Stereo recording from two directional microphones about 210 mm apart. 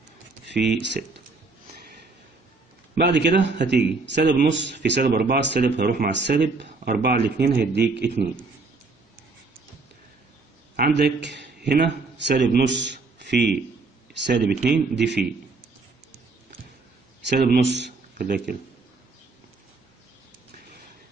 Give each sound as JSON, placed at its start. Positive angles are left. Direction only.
{"t": 0.5, "sound": "speech", "side_deg": -55}
{"t": 2.9, "sound": "speech", "side_deg": -50}
{"t": 10.8, "sound": "a man's voice", "side_deg": -50}
{"t": 17.3, "sound": "speech", "side_deg": -55}